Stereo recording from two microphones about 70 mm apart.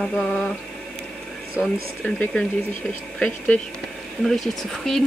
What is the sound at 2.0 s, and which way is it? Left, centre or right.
Speech, centre.